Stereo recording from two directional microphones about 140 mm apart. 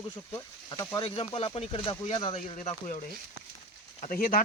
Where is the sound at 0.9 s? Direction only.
35° left (ahead or behind).